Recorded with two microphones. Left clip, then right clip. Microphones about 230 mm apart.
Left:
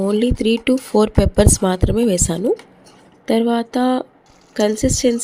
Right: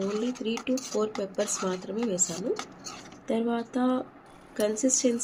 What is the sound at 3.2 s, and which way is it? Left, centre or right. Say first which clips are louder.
A woman's voice: left 12 dB; left.